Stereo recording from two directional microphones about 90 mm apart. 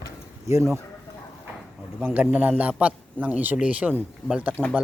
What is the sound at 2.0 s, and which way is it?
A man's voice, 15° right (ahead or behind).